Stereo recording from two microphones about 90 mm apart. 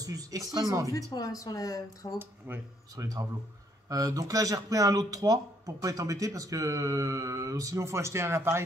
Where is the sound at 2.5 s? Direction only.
20° right (ahead or behind).